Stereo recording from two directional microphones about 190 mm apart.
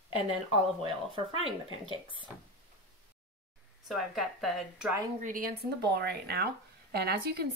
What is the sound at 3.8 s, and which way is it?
A woman's voice, centre (ahead or behind).